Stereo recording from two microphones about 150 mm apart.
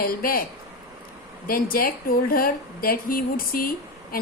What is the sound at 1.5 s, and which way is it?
A woman's voice, 70° left (ahead or behind).